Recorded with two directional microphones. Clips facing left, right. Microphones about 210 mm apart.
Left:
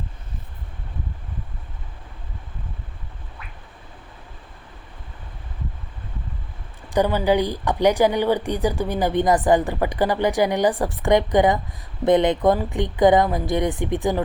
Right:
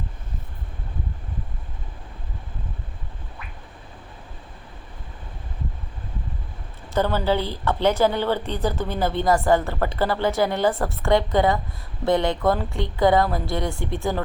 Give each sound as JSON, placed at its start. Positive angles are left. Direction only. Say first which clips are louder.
{"t": 6.9, "sound": "a woman's voice", "louder": "left 3 dB", "side_deg": 15}